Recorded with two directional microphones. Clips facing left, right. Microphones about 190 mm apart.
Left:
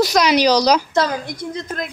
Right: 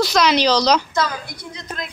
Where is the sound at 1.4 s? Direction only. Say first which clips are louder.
Left 6 dB; 50° left (ahead or behind).